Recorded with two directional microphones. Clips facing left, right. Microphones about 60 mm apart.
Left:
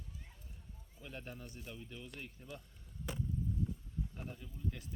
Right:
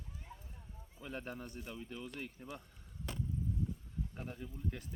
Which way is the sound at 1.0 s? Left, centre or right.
Right.